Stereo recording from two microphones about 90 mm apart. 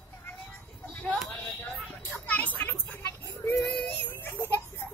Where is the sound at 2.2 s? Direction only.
20° left (ahead or behind).